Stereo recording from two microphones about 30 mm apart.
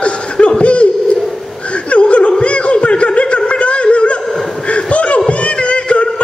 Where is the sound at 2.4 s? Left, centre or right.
Left.